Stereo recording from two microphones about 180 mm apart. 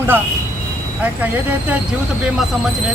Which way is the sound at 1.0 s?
10° right (ahead or behind).